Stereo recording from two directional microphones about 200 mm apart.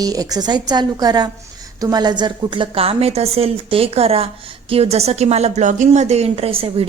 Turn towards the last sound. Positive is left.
turn(degrees=-30)  # may be behind; listen again after turning